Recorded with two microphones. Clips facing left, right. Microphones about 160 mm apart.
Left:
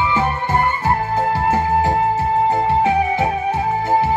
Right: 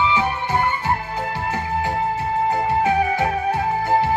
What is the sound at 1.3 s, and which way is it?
Music, 40° left (ahead or behind).